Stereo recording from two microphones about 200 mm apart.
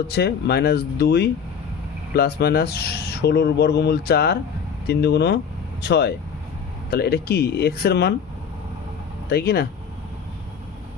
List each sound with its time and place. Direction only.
0.1 s speech: 55° left (ahead or behind)
9.3 s speech: 55° left (ahead or behind)